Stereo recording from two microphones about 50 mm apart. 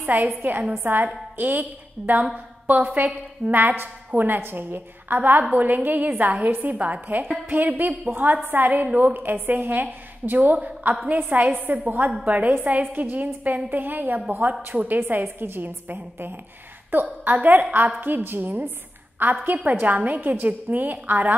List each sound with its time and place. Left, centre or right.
0.0 s a woman's voice: right